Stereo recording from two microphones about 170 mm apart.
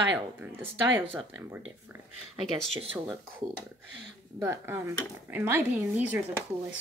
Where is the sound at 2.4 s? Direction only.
Centre (ahead or behind).